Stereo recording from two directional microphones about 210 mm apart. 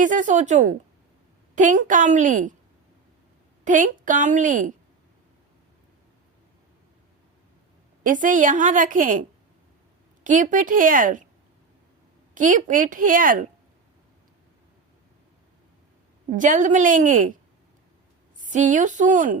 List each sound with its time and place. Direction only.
0.0 s a woman's voice: 35° right (ahead or behind)
3.6 s a woman's voice: 40° right (ahead or behind)
8.0 s a woman's voice: 40° right (ahead or behind)
10.2 s a woman's voice: 40° right (ahead or behind)
12.3 s a woman's voice: 40° right (ahead or behind)
16.3 s a woman's voice: 35° right (ahead or behind)
18.3 s a woman's voice: 35° right (ahead or behind)